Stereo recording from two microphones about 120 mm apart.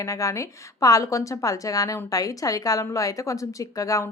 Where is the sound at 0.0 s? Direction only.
25° left (ahead or behind).